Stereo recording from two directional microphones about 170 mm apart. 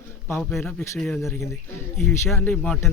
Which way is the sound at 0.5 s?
5° left (ahead or behind).